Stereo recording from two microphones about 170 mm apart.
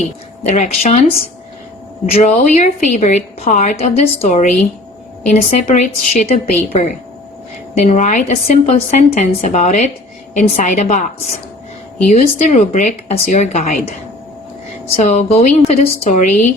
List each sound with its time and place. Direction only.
0.4 s a woman's voice: 45° left (ahead or behind)
2.0 s a woman's voice: 40° left (ahead or behind)
7.8 s a woman's voice: 40° left (ahead or behind)
14.9 s a woman's voice: 40° left (ahead or behind)